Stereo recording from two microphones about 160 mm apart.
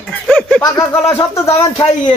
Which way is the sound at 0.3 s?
10° left (ahead or behind).